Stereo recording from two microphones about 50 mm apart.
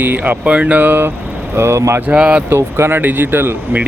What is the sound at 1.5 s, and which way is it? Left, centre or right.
Speech, right.